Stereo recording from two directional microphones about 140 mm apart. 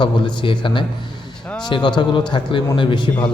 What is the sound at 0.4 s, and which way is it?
Speech, 35° left (ahead or behind).